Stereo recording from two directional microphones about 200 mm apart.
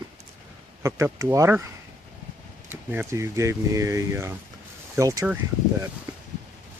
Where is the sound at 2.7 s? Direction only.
10° right (ahead or behind).